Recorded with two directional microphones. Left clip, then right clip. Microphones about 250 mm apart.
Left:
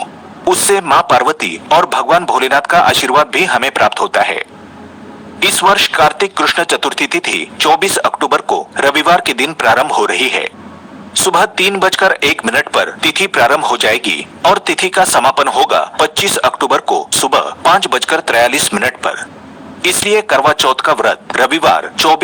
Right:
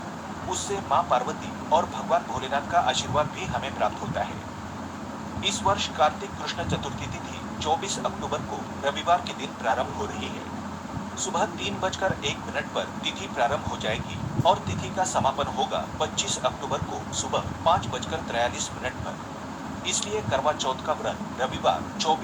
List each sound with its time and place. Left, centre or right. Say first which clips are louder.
0.7 s a man's voice: left 13 dB; left
5.4 s a man's voice: left 16 dB; left